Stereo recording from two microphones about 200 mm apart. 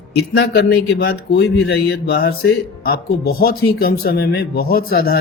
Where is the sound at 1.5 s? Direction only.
60° left (ahead or behind).